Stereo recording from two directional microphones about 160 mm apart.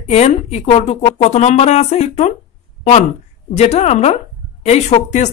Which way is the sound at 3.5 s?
45° left (ahead or behind).